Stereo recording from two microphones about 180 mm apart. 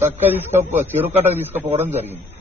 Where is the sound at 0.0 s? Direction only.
10° right (ahead or behind).